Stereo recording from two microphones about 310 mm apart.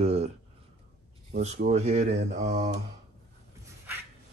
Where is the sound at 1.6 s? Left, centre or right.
Right.